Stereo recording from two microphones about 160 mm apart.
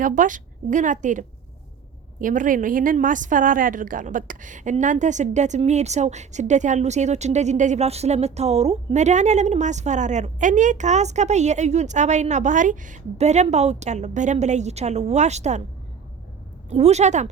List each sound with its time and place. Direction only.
0.0 s a woman's voice: 55° right (ahead or behind)
16.6 s a woman's voice: 45° right (ahead or behind)